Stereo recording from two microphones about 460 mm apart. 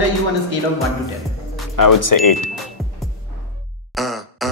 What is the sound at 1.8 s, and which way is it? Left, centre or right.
Speech, left.